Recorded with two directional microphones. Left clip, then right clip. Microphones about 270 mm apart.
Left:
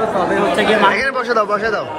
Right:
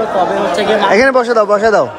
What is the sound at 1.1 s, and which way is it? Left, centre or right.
Speech, centre.